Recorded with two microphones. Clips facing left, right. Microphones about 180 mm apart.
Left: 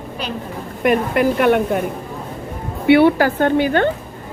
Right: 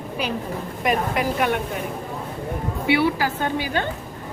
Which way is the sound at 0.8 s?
60° left (ahead or behind).